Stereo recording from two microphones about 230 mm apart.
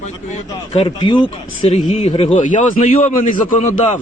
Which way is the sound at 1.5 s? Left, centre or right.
Left.